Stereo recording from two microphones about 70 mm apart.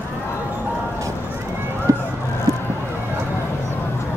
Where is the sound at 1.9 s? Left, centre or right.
Right.